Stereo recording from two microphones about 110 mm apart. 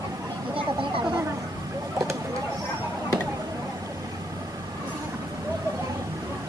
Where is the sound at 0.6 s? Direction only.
55° right (ahead or behind).